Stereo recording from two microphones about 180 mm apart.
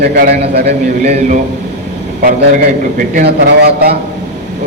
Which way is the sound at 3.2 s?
60° right (ahead or behind).